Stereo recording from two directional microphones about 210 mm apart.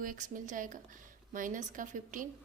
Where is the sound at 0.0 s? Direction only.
40° right (ahead or behind).